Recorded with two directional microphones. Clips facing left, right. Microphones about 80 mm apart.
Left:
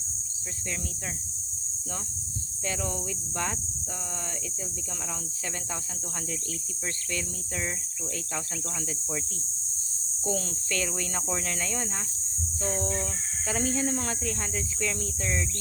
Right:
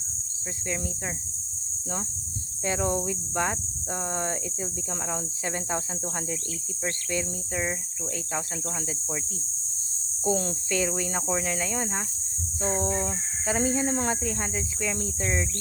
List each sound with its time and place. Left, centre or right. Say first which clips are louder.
2.6 s speech: right 6 dB; right
7.1 s speech: right 5 dB; centre
10.2 s speech: right 5 dB; right